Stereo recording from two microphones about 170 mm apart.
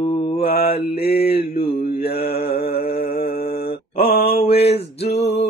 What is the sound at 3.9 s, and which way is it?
Mantra, 35° left (ahead or behind).